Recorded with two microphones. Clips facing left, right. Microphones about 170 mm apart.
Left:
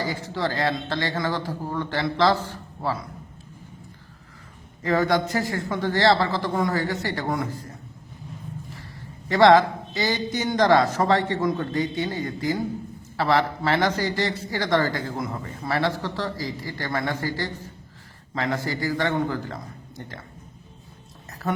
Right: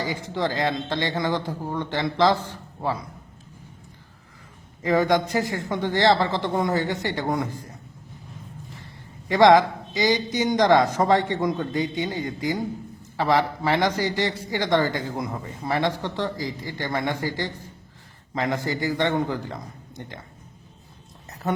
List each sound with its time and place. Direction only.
0.0 s speech: 15° right (ahead or behind)
4.8 s speech: 15° right (ahead or behind)
9.3 s a man's voice: 15° right (ahead or behind)
21.4 s a man's voice: 20° right (ahead or behind)